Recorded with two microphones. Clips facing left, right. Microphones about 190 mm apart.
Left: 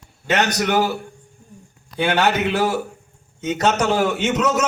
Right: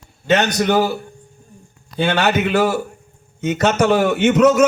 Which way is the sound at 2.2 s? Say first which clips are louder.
Right 4 dB; 55° right (ahead or behind).